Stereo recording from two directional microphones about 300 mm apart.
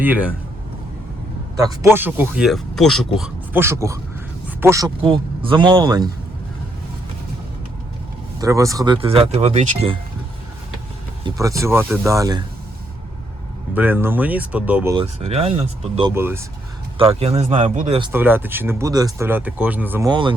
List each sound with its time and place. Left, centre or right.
0.0 s speech: centre
1.5 s a man's voice: centre
8.4 s speech: centre
11.3 s speech: centre
13.7 s speech: centre
15.2 s speech: centre
17.0 s speech: centre
18.1 s speech: centre